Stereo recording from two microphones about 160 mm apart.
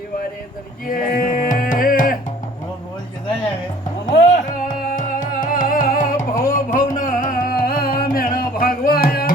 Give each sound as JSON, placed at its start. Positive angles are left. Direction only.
{"t": 0.9, "sound": "music", "side_deg": 65}
{"t": 4.1, "sound": "music", "side_deg": 50}